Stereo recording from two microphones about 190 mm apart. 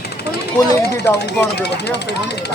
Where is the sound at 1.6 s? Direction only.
60° left (ahead or behind).